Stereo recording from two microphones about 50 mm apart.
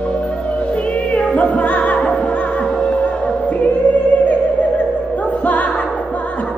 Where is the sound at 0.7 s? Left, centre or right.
Left.